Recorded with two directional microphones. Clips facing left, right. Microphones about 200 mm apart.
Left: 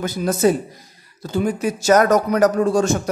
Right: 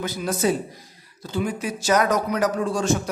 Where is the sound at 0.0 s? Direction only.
45° left (ahead or behind).